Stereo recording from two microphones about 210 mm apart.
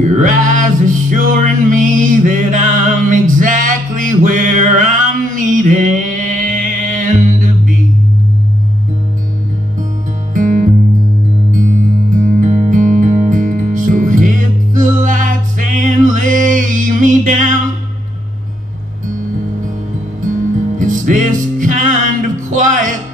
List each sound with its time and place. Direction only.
0.0 s music: 35° right (ahead or behind)
5.1 s a sound: 40° right (ahead or behind)
10.3 s music: 40° right (ahead or behind)
20.2 s music: 40° right (ahead or behind)